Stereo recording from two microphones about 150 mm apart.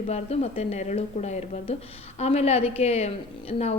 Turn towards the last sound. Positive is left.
turn(degrees=45)  # may be behind; listen again after turning